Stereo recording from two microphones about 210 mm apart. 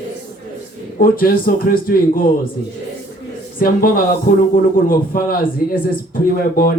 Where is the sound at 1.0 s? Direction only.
45° left (ahead or behind).